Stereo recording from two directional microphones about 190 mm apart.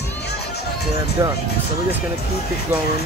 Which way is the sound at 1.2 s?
20° right (ahead or behind).